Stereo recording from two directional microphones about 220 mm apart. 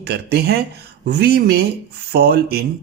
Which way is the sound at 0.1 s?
45° right (ahead or behind).